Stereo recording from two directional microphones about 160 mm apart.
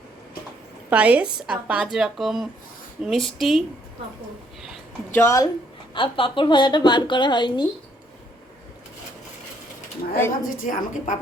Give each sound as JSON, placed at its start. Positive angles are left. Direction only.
{"t": 0.9, "sound": "speech", "side_deg": -10}
{"t": 5.1, "sound": "speech", "side_deg": 15}
{"t": 5.9, "sound": "a woman's voice", "side_deg": 30}
{"t": 10.2, "sound": "speech", "side_deg": 15}
{"t": 10.6, "sound": "a woman's voice", "side_deg": 55}